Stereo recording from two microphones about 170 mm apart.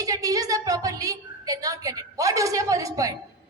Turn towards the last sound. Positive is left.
turn(degrees=-20)  # may be behind; listen again after turning